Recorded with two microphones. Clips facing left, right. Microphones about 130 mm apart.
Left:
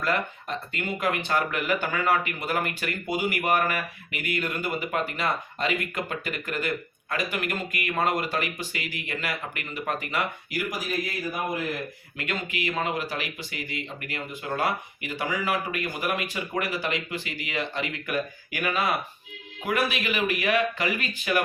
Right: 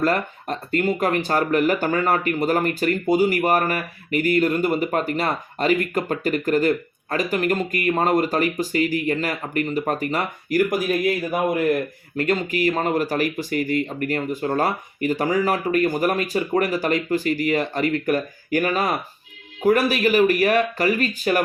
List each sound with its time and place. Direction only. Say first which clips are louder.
0.0 s speech: right 6 dB; 40° right (ahead or behind)
12.2 s speech: right 10 dB; 40° right (ahead or behind)